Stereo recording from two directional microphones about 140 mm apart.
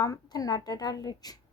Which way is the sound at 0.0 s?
25° left (ahead or behind).